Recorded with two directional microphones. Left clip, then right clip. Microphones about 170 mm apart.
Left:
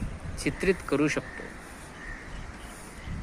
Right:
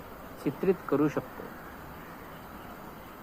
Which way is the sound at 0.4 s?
55° left (ahead or behind).